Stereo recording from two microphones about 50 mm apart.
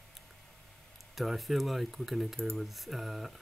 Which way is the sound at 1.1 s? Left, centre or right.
Centre.